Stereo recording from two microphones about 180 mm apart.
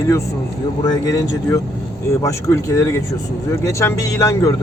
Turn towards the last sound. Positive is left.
turn(degrees=15)  # may be behind; listen again after turning